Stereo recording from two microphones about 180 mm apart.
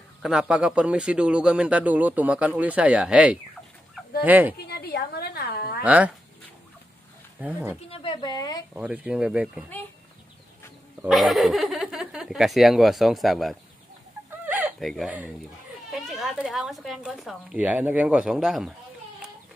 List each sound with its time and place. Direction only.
0.2 s a man's voice: 5° right (ahead or behind)
4.6 s a sound: 65° left (ahead or behind)
5.9 s a man's voice: 5° right (ahead or behind)
7.3 s a man's voice: 10° right (ahead or behind)
7.9 s a woman's voice: 30° left (ahead or behind)
8.7 s a man's voice: 10° right (ahead or behind)
11.1 s speech: centre (ahead or behind)
14.4 s a sound: 10° right (ahead or behind)
14.9 s a man's voice: 5° right (ahead or behind)